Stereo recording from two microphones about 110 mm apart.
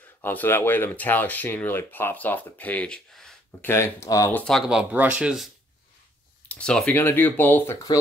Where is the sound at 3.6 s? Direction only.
25° left (ahead or behind).